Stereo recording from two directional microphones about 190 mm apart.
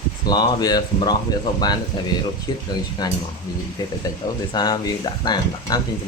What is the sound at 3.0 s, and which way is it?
Speech, 20° left (ahead or behind).